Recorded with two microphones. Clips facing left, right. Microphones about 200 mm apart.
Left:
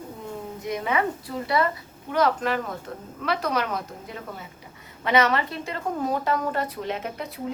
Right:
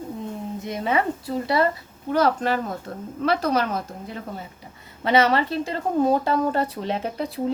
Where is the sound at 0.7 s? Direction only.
30° right (ahead or behind).